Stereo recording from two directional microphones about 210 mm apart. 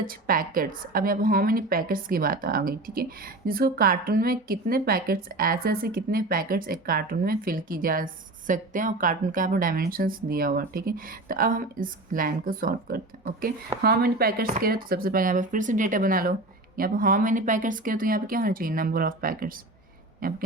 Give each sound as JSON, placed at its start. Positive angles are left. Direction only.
{"t": 0.0, "sound": "a woman's voice", "side_deg": -40}